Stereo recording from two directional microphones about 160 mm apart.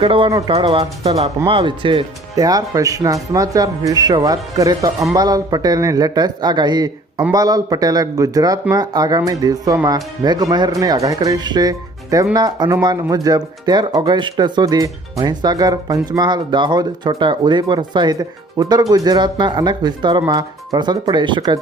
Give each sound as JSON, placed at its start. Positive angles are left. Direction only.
{"t": 0.0, "sound": "speech", "side_deg": -35}